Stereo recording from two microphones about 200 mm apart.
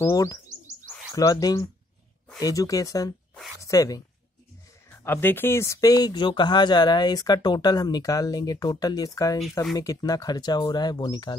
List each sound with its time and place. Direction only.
0.0 s speech: 15° left (ahead or behind)